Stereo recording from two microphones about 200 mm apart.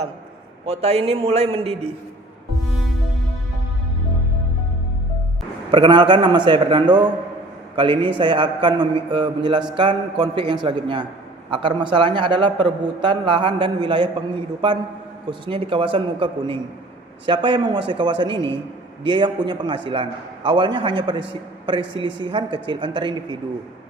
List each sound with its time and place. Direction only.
0.6 s a man's voice: 30° right (ahead or behind)
5.7 s a man's voice: 25° right (ahead or behind)
15.3 s a man's voice: 25° right (ahead or behind)